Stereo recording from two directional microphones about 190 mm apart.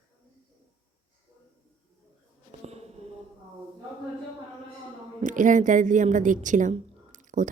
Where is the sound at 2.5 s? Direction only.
35° right (ahead or behind).